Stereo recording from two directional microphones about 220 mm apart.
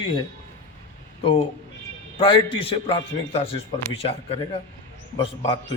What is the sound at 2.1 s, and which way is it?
A man's voice, 25° left (ahead or behind).